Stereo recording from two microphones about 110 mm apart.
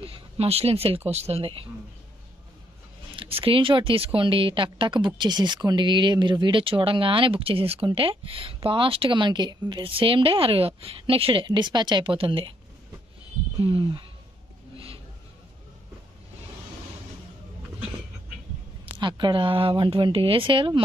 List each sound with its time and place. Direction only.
0.0 s a woman's voice: 65° right (ahead or behind)
3.2 s speech: 55° right (ahead or behind); by 9.8 s 40° right (ahead or behind)
9.8 s a woman's voice: 55° right (ahead or behind)
13.6 s speech: 55° right (ahead or behind)
18.9 s speech: 45° right (ahead or behind)